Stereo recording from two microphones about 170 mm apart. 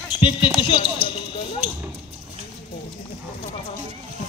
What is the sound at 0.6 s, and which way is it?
Speech, 30° left (ahead or behind).